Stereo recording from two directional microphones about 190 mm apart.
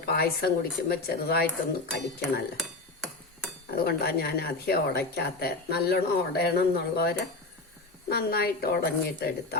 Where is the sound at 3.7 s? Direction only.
55° left (ahead or behind).